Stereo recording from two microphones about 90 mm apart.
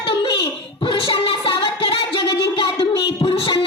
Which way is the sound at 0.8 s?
70° left (ahead or behind).